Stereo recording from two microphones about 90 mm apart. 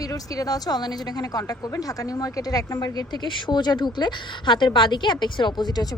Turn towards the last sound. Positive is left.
turn(degrees=50)  # may be behind; listen again after turning